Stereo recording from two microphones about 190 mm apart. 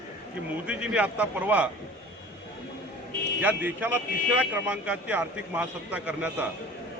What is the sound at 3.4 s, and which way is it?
Speech, 10° right (ahead or behind).